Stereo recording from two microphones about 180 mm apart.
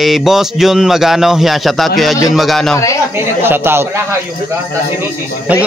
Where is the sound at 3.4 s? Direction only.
10° right (ahead or behind).